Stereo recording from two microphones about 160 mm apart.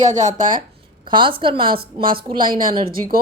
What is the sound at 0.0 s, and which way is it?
Speech, 50° right (ahead or behind).